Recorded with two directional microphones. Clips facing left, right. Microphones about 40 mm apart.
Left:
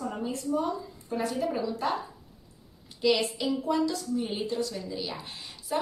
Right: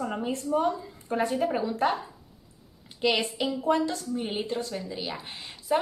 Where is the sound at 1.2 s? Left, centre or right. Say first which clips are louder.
Right 3 dB; right.